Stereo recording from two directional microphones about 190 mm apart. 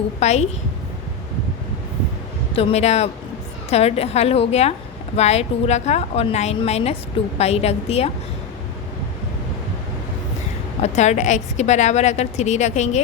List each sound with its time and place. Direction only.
0.2 s a woman's voice: 35° left (ahead or behind)
2.5 s a woman's voice: 30° left (ahead or behind)
10.8 s a woman's voice: 35° left (ahead or behind)